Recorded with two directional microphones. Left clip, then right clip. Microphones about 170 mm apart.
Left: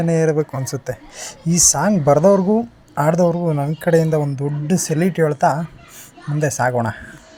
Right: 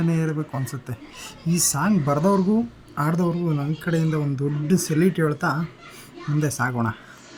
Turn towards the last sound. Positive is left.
turn(degrees=25)  # may be behind; listen again after turning